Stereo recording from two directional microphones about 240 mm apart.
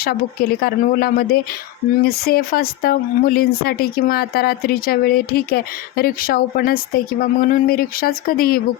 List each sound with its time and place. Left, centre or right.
0.6 s speech: left